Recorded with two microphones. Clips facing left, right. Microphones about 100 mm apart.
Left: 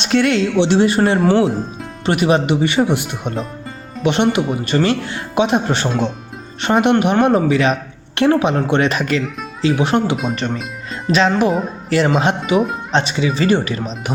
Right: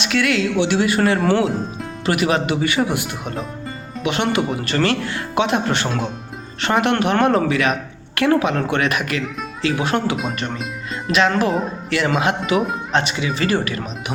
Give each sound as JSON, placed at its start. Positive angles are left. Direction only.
{"t": 0.0, "sound": "speech", "side_deg": 35}